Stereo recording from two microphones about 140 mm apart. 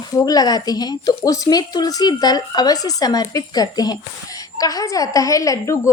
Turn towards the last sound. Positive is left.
turn(degrees=25)  # may be behind; listen again after turning